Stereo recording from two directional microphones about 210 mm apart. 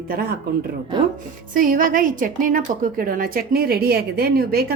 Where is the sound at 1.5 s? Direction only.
40° right (ahead or behind).